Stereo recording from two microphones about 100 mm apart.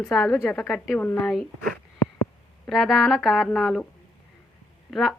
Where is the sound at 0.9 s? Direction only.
15° left (ahead or behind).